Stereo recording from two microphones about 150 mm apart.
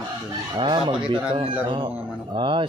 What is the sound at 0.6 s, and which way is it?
Speech, 30° right (ahead or behind).